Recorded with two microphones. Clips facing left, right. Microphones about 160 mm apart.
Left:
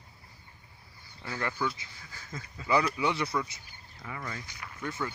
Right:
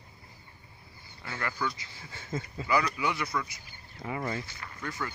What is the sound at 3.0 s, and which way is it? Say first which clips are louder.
Speech: left 2 dB; 30° left (ahead or behind).